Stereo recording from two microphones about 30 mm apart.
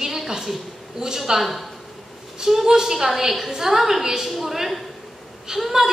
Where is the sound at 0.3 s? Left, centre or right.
Centre.